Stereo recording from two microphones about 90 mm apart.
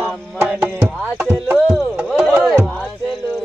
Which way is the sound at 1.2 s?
20° right (ahead or behind).